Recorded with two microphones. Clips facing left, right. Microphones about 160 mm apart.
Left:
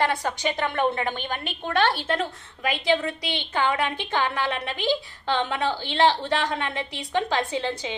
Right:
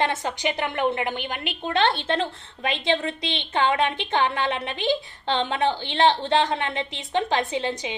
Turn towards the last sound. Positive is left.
turn(degrees=-15)  # may be behind; listen again after turning